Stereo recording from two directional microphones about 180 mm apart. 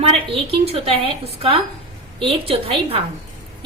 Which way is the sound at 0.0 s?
35° right (ahead or behind).